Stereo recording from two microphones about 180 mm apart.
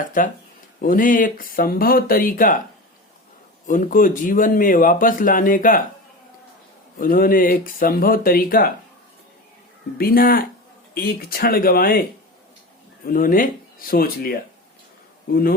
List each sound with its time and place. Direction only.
0.0 s speech: 45° left (ahead or behind)
3.7 s speech: 45° left (ahead or behind)
7.0 s speech: 55° left (ahead or behind)
10.0 s speech: 55° left (ahead or behind)
13.1 s speech: 50° left (ahead or behind)